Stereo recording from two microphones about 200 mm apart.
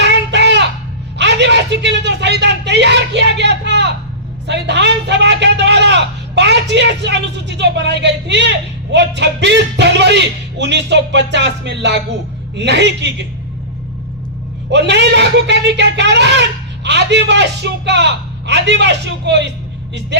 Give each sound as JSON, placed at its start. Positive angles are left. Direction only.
{"t": 0.0, "sound": "a sound", "side_deg": -60}
{"t": 4.4, "sound": "a man's voice", "side_deg": -60}
{"t": 14.7, "sound": "a man's voice", "side_deg": -60}